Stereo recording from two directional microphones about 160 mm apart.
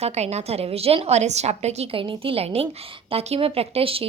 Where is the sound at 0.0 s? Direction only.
45° right (ahead or behind).